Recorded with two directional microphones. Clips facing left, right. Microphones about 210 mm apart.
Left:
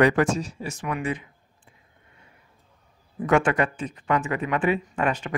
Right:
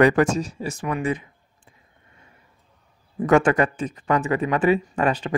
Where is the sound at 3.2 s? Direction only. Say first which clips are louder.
Right 4 dB; 40° right (ahead or behind).